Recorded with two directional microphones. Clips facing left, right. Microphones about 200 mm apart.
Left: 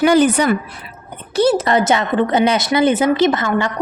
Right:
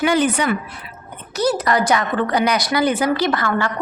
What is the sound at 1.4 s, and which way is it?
A woman's voice, 25° left (ahead or behind).